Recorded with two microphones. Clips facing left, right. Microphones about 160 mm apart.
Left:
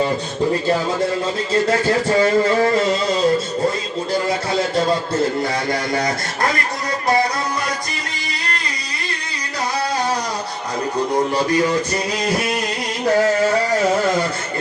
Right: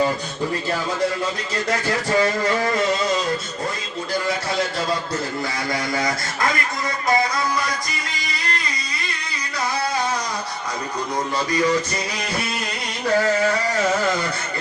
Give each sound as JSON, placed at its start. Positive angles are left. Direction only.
{"t": 1.7, "sound": "a man's voice", "side_deg": 30}